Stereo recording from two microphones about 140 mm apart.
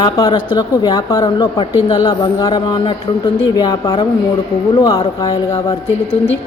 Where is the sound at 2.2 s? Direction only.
25° left (ahead or behind).